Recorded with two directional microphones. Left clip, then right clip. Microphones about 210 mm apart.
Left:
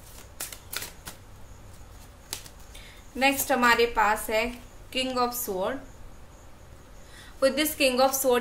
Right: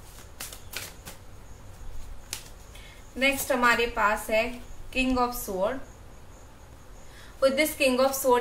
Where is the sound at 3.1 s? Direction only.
45° left (ahead or behind).